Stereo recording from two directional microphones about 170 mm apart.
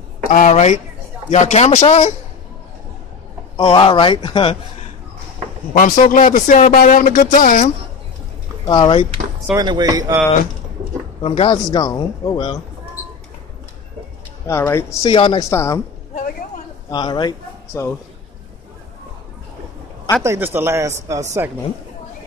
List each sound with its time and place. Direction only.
0.3 s speech: 45° left (ahead or behind)
3.5 s speech: 30° left (ahead or behind)
5.7 s speech: 50° left (ahead or behind)
8.6 s speech: 25° left (ahead or behind)
9.5 s speech: 25° right (ahead or behind)
11.2 s speech: 30° left (ahead or behind)
14.4 s speech: 15° left (ahead or behind)
15.0 s speech: 30° left (ahead or behind)
15.5 s speech: 15° left (ahead or behind)
16.9 s speech: 25° left (ahead or behind)
20.2 s speech: 10° right (ahead or behind)